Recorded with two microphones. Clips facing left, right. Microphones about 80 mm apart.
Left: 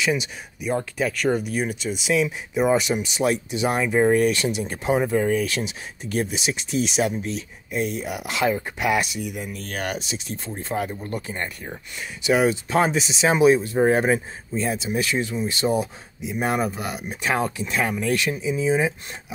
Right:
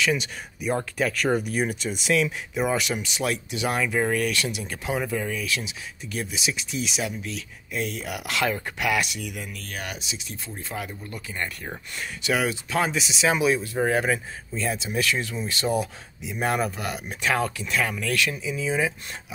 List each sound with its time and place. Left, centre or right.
0.0 s speech: centre
0.6 s speech: centre; by 9.7 s left
9.7 s speech: left
12.2 s speech: left